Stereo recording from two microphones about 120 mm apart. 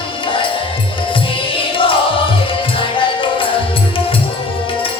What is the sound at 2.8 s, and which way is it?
Music, 45° left (ahead or behind).